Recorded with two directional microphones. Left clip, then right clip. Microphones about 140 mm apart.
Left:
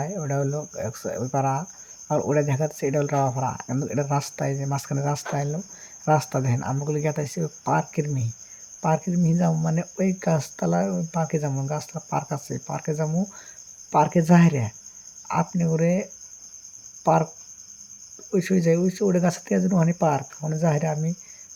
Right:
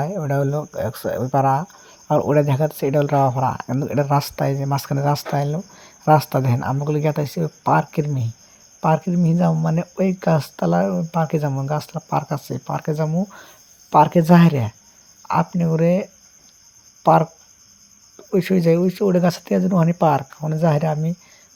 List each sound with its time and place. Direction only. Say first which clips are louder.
0.0 s speech: right 5 dB; 25° right (ahead or behind)
18.3 s speech: right 4 dB; 20° right (ahead or behind)